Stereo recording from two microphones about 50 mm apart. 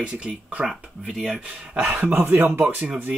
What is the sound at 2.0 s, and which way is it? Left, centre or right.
Speech, right.